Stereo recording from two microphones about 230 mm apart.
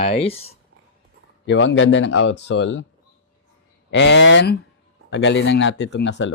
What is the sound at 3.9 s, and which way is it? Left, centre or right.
Speech, left.